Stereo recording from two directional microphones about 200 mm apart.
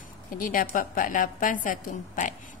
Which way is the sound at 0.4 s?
45° left (ahead or behind).